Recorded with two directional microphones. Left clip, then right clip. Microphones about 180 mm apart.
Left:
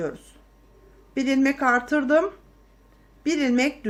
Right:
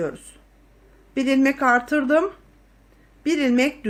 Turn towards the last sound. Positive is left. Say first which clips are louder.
# right 2 dB
turn(degrees=-20)  # may be behind; listen again after turning